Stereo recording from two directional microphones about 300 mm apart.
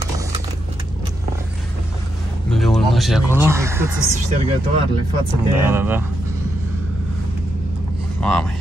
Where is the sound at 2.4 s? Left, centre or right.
Centre.